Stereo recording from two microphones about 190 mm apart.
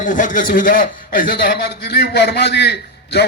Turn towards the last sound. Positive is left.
turn(degrees=60)  # may be behind; listen again after turning